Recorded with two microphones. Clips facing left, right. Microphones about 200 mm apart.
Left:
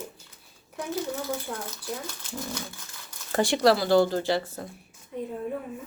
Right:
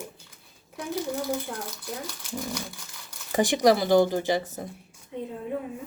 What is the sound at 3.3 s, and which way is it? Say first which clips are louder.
Speech: right 1 dB; 15° right (ahead or behind).